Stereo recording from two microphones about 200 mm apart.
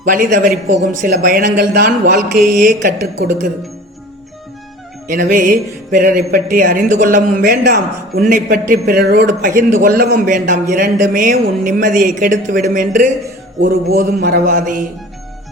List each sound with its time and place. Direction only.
0.1 s a man's voice: 45° right (ahead or behind)
5.0 s a man's voice: 40° right (ahead or behind)